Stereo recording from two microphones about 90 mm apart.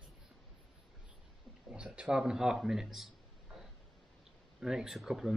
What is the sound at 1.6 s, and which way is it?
Speech, 10° right (ahead or behind).